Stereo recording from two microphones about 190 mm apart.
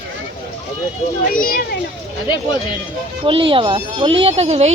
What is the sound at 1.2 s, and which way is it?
Speech, 45° left (ahead or behind).